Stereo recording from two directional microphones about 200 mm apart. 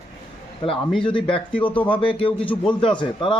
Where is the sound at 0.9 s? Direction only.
5° left (ahead or behind).